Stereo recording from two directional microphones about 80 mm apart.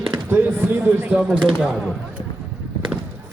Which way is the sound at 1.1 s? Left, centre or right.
Centre.